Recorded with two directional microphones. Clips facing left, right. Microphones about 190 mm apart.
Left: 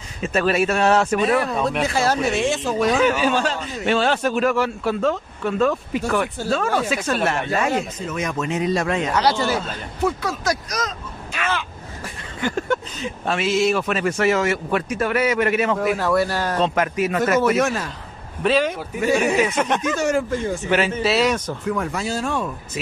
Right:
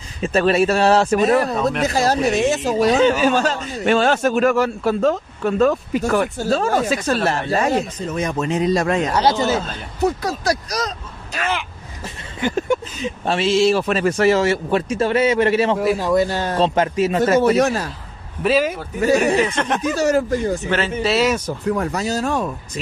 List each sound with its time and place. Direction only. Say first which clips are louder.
0.2 s a man's voice: right 3 dB; 35° right (ahead or behind)
3.2 s a man's voice: right 3 dB; 45° right (ahead or behind)
9.2 s a man's voice: right 2 dB; 20° right (ahead or behind)
10.0 s a man's voice: right 3 dB; 35° right (ahead or behind)
12.4 s speech: right 3 dB; 20° right (ahead or behind)
13.3 s a man's voice: right 3 dB; 30° right (ahead or behind)
16.0 s a man's voice: right 2 dB; 20° right (ahead or behind); by 17.8 s 35° right (ahead or behind)
18.4 s speech: right 1 dB; 5° right (ahead or behind)
19.0 s a man's voice: right 3 dB; 40° right (ahead or behind)
19.3 s speech: right 1 dB; 5° left (ahead or behind)
19.9 s a man's voice: right 3 dB; 35° right (ahead or behind)
21.0 s speech: right 1 dB; centre (ahead or behind)
21.6 s a man's voice: right 4 dB; 40° right (ahead or behind)